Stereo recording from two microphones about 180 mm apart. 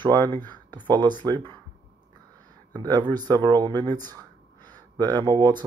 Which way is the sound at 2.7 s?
20° right (ahead or behind).